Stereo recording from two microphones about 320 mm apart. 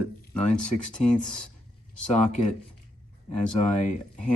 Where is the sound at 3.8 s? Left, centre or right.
Left.